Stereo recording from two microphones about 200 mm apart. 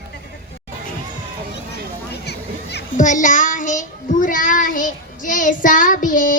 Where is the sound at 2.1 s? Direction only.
55° left (ahead or behind).